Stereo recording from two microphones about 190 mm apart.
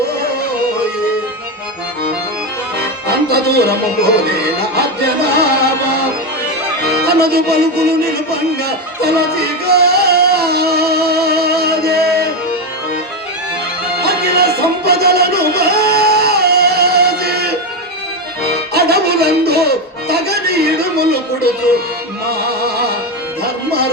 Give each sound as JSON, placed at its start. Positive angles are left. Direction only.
{"t": 3.2, "sound": "music", "side_deg": -55}
{"t": 6.8, "sound": "music", "side_deg": -55}
{"t": 14.0, "sound": "music", "side_deg": -55}